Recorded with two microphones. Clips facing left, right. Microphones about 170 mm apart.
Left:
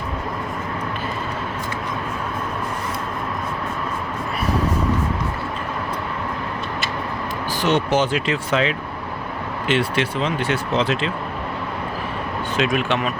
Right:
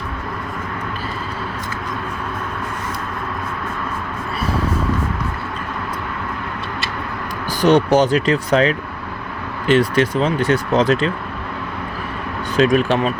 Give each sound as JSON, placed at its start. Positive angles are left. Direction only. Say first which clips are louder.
{"t": 7.6, "sound": "speech", "louder": "right 6 dB", "side_deg": -40}
{"t": 12.5, "sound": "speech", "louder": "right 6 dB", "side_deg": -40}